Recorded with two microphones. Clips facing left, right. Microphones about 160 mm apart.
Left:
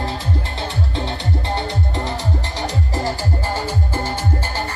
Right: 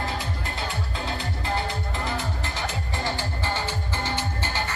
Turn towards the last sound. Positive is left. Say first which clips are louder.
# left 5 dB
turn(degrees=40)  # may be behind; listen again after turning